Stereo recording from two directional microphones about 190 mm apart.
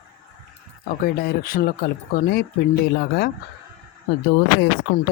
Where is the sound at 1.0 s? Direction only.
50° left (ahead or behind).